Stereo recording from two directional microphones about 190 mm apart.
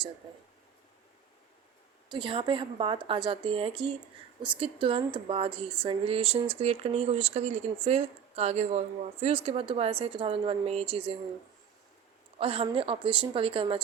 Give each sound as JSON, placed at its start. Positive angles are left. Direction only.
{"t": 2.0, "sound": "a woman's voice", "side_deg": -25}
{"t": 12.4, "sound": "speech", "side_deg": -30}